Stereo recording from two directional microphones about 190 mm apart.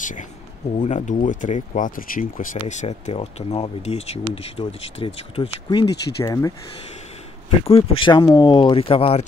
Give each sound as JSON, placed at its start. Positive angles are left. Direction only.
{"t": 0.0, "sound": "speech", "side_deg": 40}
{"t": 7.6, "sound": "speech", "side_deg": 30}